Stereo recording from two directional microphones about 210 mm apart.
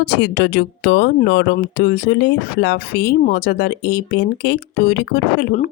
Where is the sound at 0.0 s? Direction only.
50° left (ahead or behind).